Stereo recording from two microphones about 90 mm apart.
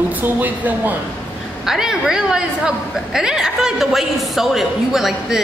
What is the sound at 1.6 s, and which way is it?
A woman's voice, 5° right (ahead or behind).